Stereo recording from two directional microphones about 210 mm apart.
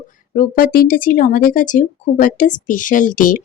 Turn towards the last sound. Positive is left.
turn(degrees=40)  # may be behind; listen again after turning